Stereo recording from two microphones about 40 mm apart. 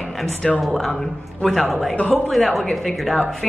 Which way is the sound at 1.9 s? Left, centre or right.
Left.